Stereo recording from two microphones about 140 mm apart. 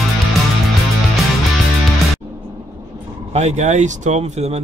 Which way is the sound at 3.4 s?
55° right (ahead or behind).